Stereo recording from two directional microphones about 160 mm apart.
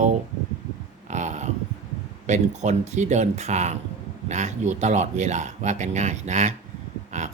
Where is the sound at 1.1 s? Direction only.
45° right (ahead or behind).